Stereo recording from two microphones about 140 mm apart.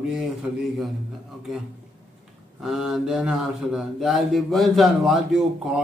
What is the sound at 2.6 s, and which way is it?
Speech, centre (ahead or behind).